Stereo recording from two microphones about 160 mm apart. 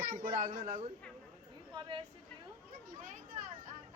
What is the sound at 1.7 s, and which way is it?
Speech, 30° right (ahead or behind).